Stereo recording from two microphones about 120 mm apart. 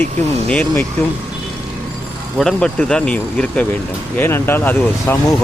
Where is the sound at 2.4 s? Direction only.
5° left (ahead or behind).